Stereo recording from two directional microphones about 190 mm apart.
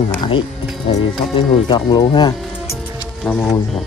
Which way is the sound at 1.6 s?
25° left (ahead or behind).